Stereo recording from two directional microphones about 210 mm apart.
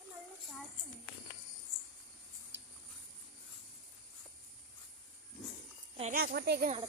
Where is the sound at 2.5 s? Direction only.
60° right (ahead or behind).